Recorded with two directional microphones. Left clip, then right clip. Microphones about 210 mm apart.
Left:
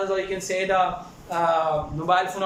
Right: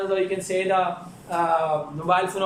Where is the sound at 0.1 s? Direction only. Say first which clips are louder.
Right 2 dB; centre (ahead or behind).